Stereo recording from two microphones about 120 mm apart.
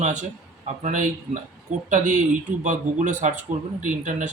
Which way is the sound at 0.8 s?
90° right.